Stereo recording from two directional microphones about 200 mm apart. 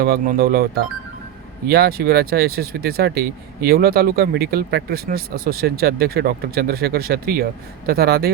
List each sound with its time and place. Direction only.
0.0 s speech: 50° right (ahead or behind)